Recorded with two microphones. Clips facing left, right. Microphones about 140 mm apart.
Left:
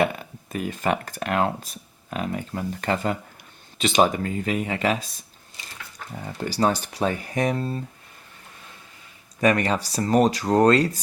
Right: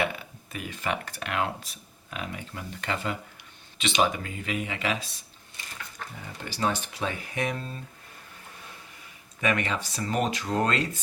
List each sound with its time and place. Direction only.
0.0 s speech: 45° left (ahead or behind)
6.4 s speech: 40° left (ahead or behind)
9.4 s speech: 40° left (ahead or behind)